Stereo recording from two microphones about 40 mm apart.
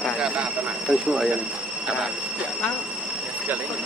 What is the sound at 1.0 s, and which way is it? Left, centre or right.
Speech, centre.